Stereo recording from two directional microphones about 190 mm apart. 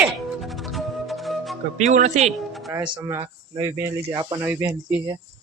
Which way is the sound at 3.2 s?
25° right (ahead or behind).